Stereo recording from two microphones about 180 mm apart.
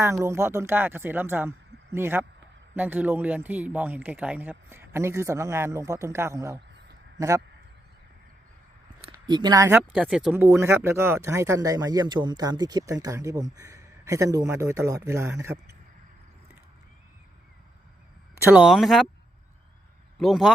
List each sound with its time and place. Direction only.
0.0 s speech: 15° right (ahead or behind)
9.2 s speech: 25° right (ahead or behind)
18.5 s speech: 5° right (ahead or behind)
20.1 s speech: centre (ahead or behind)